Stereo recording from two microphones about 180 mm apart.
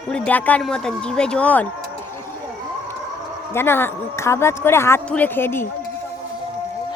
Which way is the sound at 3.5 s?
15° left (ahead or behind).